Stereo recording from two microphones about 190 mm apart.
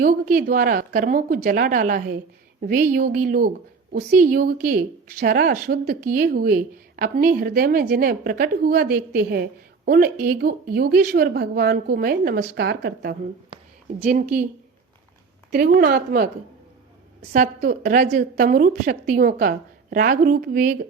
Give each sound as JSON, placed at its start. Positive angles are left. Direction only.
{"t": 0.0, "sound": "a woman's voice", "side_deg": -45}
{"t": 14.0, "sound": "a woman's voice", "side_deg": -40}
{"t": 15.5, "sound": "a woman's voice", "side_deg": -55}
{"t": 17.6, "sound": "a woman's voice", "side_deg": -50}